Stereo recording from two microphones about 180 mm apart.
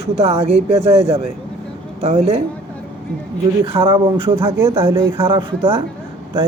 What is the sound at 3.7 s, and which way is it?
Speech, 30° right (ahead or behind).